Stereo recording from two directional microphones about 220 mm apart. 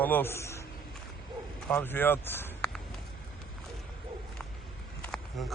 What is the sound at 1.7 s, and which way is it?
Speech, 10° left (ahead or behind).